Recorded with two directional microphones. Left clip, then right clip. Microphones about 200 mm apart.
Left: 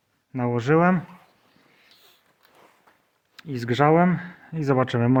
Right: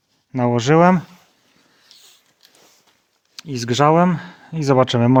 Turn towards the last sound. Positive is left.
turn(degrees=-45)  # may be behind; listen again after turning